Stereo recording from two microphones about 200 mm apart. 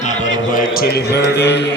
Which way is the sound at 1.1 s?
55° left (ahead or behind).